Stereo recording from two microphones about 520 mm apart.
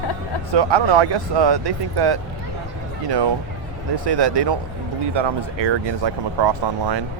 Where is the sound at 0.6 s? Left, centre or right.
Right.